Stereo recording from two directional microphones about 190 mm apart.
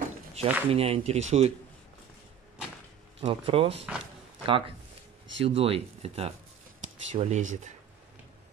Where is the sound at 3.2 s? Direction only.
30° right (ahead or behind).